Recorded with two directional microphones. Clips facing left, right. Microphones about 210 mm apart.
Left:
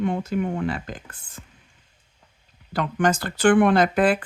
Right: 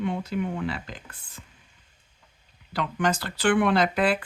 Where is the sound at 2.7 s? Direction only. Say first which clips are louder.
Left 4 dB; 50° left (ahead or behind).